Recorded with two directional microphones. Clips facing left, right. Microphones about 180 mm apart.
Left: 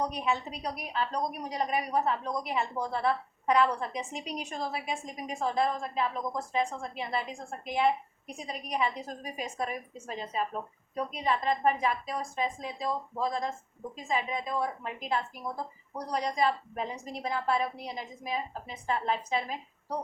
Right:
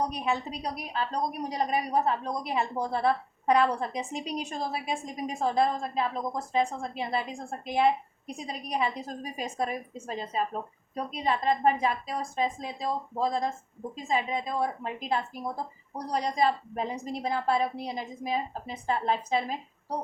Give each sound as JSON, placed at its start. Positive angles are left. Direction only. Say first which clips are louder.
{"t": 0.1, "sound": "a woman's voice", "louder": "right 1 dB", "side_deg": -35}